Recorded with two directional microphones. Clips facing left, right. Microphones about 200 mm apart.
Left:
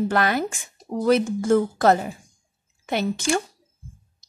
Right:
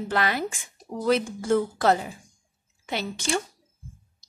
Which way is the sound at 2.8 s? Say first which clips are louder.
Left 6 dB; 50° left (ahead or behind).